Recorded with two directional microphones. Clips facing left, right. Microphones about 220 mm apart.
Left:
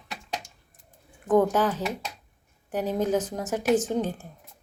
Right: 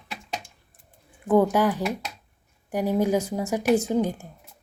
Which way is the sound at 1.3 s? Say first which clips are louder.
Right 2 dB; 10° right (ahead or behind).